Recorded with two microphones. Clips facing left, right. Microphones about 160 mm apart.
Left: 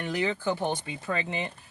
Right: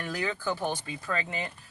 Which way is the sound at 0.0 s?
20° left (ahead or behind).